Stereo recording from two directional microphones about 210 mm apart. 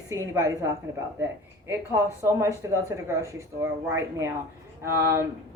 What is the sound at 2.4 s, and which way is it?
A woman's voice, 15° right (ahead or behind).